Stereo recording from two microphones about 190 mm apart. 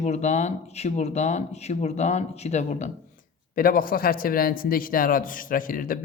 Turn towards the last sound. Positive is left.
turn(degrees=45)  # may be behind; listen again after turning